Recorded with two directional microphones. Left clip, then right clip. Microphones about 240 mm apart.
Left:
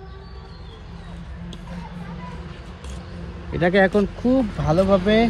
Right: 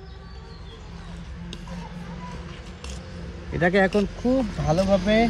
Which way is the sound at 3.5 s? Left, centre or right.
Right.